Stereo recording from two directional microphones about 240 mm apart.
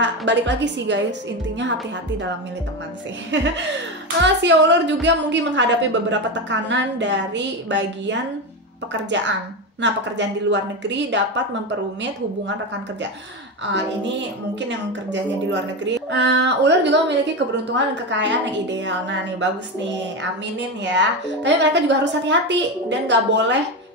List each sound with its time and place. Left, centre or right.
0.0 s a woman's voice: right
3.3 s a woman's voice: right
9.8 s a woman's voice: right
14.9 s a woman's voice: right
20.5 s a woman's voice: right